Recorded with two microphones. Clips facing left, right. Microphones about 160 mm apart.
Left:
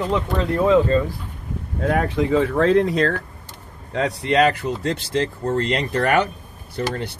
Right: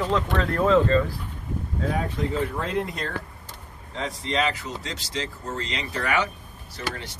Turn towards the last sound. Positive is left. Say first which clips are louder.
# left 8 dB
turn(degrees=60)  # may be behind; listen again after turning